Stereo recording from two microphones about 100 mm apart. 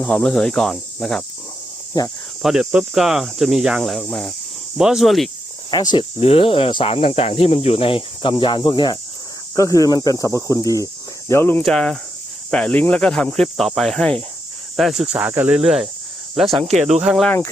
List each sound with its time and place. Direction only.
0.0 s speech: 10° left (ahead or behind)
2.0 s speech: 40° left (ahead or behind)
2.4 s cricket: 5° right (ahead or behind)
5.7 s speech: 45° left (ahead or behind)
6.1 s speech: 75° left (ahead or behind); by 6.9 s 60° left (ahead or behind)
6.9 s speech: 70° left (ahead or behind); by 9.0 s 50° left (ahead or behind)
9.6 s speech: 35° left (ahead or behind)
11.3 s speech: 25° left (ahead or behind)
11.6 s speech: 5° left (ahead or behind); by 15.3 s 10° right (ahead or behind)
15.3 s speech: 25° right (ahead or behind)
15.5 s cricket: 5° right (ahead or behind)
16.8 s speech: 5° right (ahead or behind)